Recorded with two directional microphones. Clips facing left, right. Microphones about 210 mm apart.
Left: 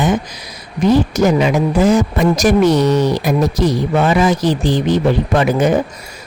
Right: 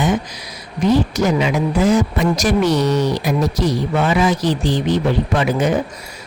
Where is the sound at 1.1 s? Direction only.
50° left (ahead or behind).